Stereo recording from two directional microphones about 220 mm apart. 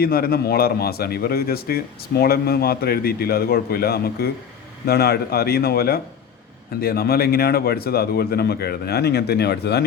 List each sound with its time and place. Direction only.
0.0 s a man's voice: 45° left (ahead or behind)